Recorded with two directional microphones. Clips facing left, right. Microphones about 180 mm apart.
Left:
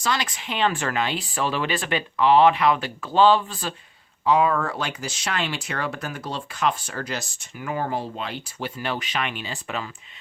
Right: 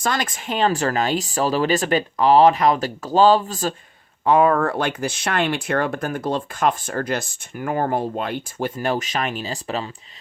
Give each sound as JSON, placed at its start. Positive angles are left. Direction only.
{"t": 0.0, "sound": "speech", "side_deg": -50}
{"t": 4.2, "sound": "speech", "side_deg": -50}